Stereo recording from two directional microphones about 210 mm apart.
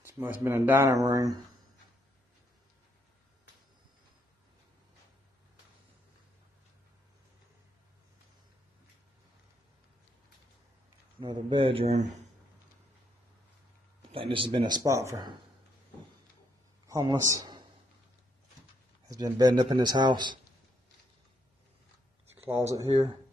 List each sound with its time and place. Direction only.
0.2 s speech: 10° right (ahead or behind)
11.1 s speech: 25° right (ahead or behind)
14.1 s speech: 25° right (ahead or behind)
16.8 s a man's voice: 15° right (ahead or behind)
19.0 s speech: 20° right (ahead or behind)
22.4 s speech: 10° right (ahead or behind)